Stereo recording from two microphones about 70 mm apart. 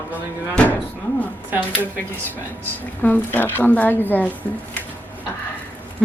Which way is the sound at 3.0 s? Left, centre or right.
Left.